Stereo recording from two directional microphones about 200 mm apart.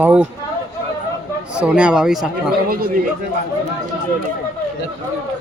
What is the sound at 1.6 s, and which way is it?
Speech, 5° right (ahead or behind).